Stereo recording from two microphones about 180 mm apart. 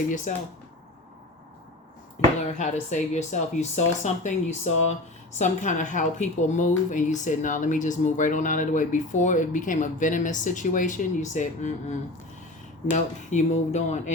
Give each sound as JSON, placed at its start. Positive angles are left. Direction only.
{"t": 0.3, "sound": "a woman's voice", "side_deg": 45}
{"t": 2.6, "sound": "a woman's voice", "side_deg": 40}